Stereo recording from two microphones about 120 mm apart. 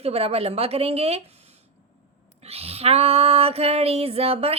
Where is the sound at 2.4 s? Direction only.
55° right (ahead or behind).